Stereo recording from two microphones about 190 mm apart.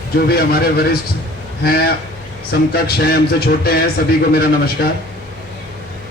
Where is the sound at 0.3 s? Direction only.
55° left (ahead or behind).